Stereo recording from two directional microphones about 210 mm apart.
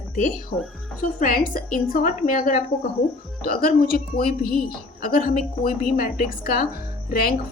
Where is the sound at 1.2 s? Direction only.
40° left (ahead or behind).